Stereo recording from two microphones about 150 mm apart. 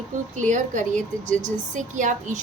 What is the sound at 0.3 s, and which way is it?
A woman's voice, 55° right (ahead or behind).